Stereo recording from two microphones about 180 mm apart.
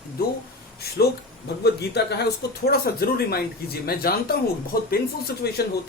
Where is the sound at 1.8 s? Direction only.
65° left (ahead or behind).